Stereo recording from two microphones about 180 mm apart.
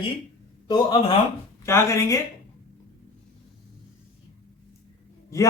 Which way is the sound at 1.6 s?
15° left (ahead or behind).